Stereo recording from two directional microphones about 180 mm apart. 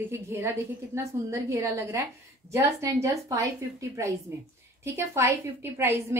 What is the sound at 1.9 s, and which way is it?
A woman's voice, 15° right (ahead or behind).